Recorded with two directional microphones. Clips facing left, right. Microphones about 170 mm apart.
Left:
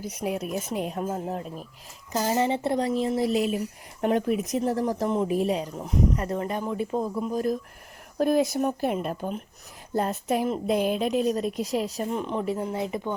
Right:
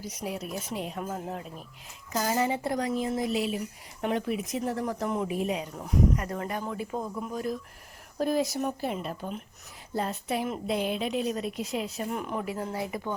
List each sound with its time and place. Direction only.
0.0 s speech: 60° left (ahead or behind)
1.0 s speech: 35° left (ahead or behind)
2.1 s speech: 25° left (ahead or behind)
3.3 s a woman's voice: 45° left (ahead or behind)
5.8 s speech: 25° left (ahead or behind)
8.2 s a woman's voice: 55° left (ahead or behind); by 12.0 s 40° left (ahead or behind)
12.1 s speech: 25° left (ahead or behind)